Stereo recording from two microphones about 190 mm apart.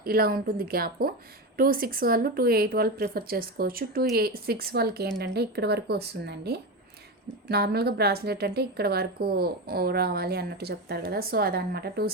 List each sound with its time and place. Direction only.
0.0 s a woman's voice: 50° right (ahead or behind)